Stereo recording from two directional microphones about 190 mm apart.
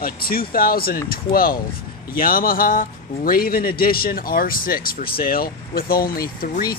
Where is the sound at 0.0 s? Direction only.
50° left (ahead or behind).